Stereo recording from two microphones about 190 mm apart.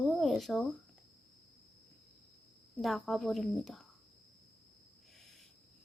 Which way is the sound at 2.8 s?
Centre (ahead or behind).